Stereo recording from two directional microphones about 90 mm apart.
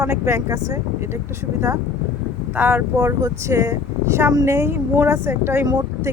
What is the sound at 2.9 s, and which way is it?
Speech, 40° right (ahead or behind).